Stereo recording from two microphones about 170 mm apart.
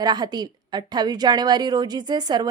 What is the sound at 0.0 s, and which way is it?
A woman's voice, 25° right (ahead or behind).